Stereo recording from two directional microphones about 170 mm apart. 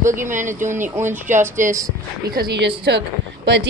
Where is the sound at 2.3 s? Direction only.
65° right (ahead or behind).